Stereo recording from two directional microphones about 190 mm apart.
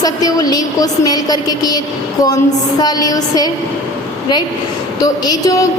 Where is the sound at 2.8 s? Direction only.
20° left (ahead or behind).